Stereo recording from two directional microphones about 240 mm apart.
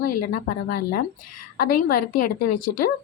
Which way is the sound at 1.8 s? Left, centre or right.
Left.